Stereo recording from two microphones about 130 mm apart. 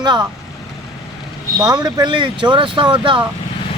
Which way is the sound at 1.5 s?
30° right (ahead or behind).